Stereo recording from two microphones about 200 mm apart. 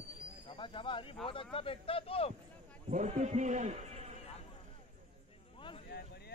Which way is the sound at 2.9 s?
35° right (ahead or behind).